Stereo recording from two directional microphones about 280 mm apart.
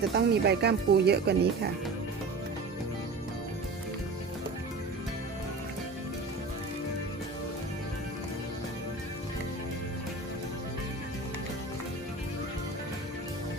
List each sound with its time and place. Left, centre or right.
0.1 s speech: right